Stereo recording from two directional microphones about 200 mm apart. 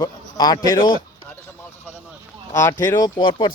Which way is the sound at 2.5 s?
15° left (ahead or behind).